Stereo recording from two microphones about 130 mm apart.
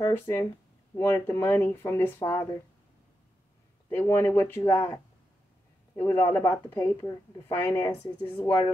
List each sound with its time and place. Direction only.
0.0 s a woman's voice: 25° left (ahead or behind)
3.9 s speech: 20° left (ahead or behind)
5.9 s a woman's voice: 15° left (ahead or behind)